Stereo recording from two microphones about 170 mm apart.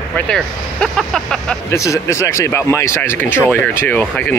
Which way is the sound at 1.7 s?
20° left (ahead or behind).